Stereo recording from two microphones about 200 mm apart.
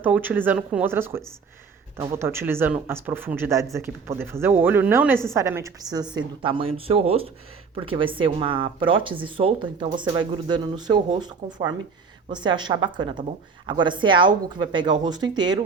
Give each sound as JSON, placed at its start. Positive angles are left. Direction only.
{"t": 0.0, "sound": "a woman's voice", "side_deg": -10}